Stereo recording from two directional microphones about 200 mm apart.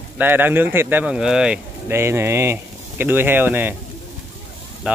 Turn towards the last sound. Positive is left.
turn(degrees=-5)  # may be behind; listen again after turning